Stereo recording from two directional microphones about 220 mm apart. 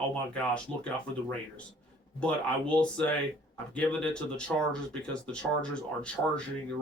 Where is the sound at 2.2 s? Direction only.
5° left (ahead or behind).